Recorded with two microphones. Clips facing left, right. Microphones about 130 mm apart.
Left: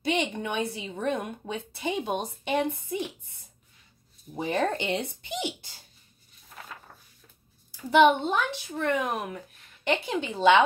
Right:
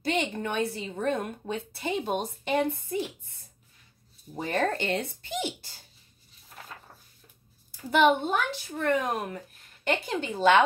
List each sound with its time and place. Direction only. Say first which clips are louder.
0.0 s a woman's voice: left 1 dB; 15° left (ahead or behind)
1.8 s speech: left 1 dB; centre (ahead or behind)
2.2 s speech: even; 20° left (ahead or behind)
4.4 s speech: left 1 dB; 15° left (ahead or behind)
7.7 s a child's voice: left 2 dB; centre (ahead or behind)
9.9 s speech: left 1 dB; 20° left (ahead or behind)